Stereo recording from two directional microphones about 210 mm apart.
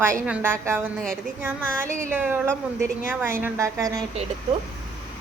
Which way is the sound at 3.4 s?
15° right (ahead or behind).